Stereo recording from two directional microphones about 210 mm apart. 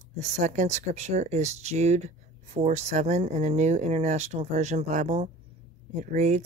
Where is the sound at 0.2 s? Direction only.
35° right (ahead or behind).